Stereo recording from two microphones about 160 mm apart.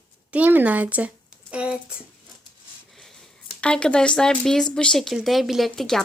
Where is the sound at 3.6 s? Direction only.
5° left (ahead or behind).